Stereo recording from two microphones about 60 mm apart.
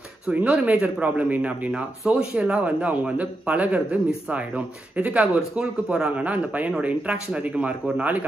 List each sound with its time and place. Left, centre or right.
0.3 s a man's voice: right
2.6 s a man's voice: right
5.2 s a man's voice: centre